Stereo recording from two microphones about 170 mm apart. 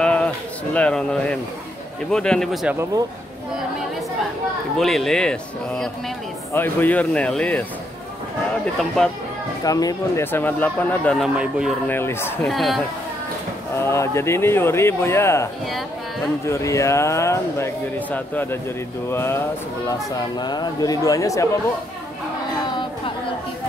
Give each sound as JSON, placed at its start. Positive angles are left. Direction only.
{"t": 0.0, "sound": "a sound", "side_deg": 5}
{"t": 0.7, "sound": "speech", "side_deg": 5}
{"t": 4.7, "sound": "speech", "side_deg": 0}
{"t": 8.7, "sound": "speech", "side_deg": 0}
{"t": 9.7, "sound": "speech", "side_deg": 20}
{"t": 11.3, "sound": "speech", "side_deg": -5}
{"t": 11.9, "sound": "speech", "side_deg": 15}
{"t": 12.4, "sound": "speech", "side_deg": 0}
{"t": 13.7, "sound": "speech", "side_deg": 15}